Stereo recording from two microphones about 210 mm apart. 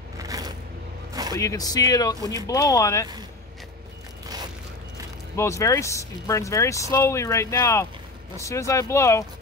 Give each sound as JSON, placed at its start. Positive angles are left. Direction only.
{"t": 0.2, "sound": "a sound", "side_deg": -15}
{"t": 1.4, "sound": "speech", "side_deg": 15}
{"t": 2.1, "sound": "speech", "side_deg": -15}
{"t": 2.4, "sound": "speech", "side_deg": 15}
{"t": 5.3, "sound": "speech", "side_deg": 15}